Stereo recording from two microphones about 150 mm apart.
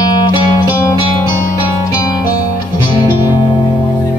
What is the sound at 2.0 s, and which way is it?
Music, 25° left (ahead or behind).